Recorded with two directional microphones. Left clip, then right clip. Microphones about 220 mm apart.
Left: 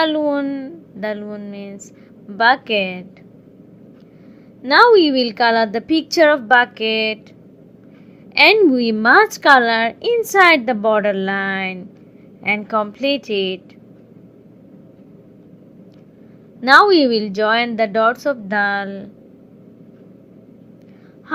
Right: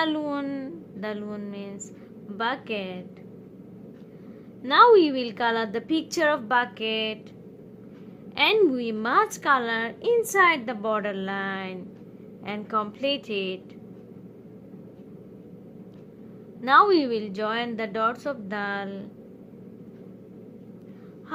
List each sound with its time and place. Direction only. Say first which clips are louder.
0.0 s a woman's voice: left 10 dB; 15° left (ahead or behind)
4.6 s a woman's voice: left 6 dB; 15° left (ahead or behind)
8.4 s a woman's voice: left 10 dB; 15° left (ahead or behind)
16.6 s a woman's voice: left 8 dB; 15° left (ahead or behind)